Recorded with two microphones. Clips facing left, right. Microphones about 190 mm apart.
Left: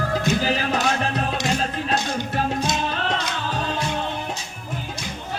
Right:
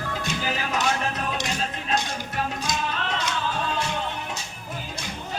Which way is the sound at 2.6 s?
35° left (ahead or behind).